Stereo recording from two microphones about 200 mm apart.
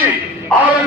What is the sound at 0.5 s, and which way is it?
Speech, 5° left (ahead or behind).